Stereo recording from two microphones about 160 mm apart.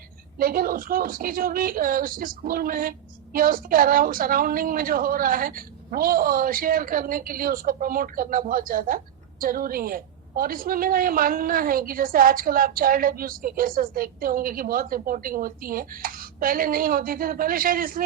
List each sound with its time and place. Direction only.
0.3 s a woman's voice: 65° right (ahead or behind)